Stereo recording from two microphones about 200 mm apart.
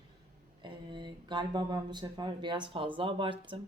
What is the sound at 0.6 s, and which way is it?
Speech, 25° right (ahead or behind).